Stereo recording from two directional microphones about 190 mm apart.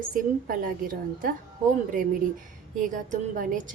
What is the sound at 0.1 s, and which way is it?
Speech, 45° right (ahead or behind).